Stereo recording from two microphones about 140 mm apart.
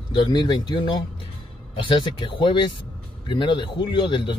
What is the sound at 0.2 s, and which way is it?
Speech, 30° left (ahead or behind).